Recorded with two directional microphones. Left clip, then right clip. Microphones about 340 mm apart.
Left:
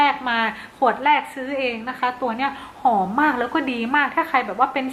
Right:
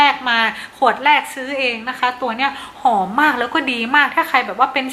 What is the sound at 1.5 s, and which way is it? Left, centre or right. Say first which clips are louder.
Speech: right 4 dB; centre.